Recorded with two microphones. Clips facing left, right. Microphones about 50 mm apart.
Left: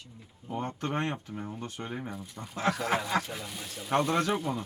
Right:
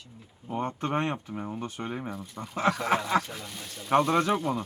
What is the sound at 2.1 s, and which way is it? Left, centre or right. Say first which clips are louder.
Speech: right 3 dB; centre.